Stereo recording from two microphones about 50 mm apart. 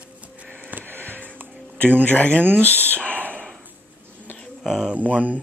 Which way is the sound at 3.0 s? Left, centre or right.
Left.